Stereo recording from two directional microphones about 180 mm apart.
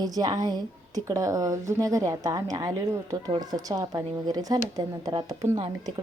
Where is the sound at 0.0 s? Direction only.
20° right (ahead or behind).